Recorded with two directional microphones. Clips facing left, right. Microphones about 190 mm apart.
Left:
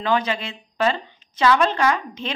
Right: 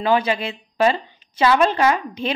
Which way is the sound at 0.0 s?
10° right (ahead or behind).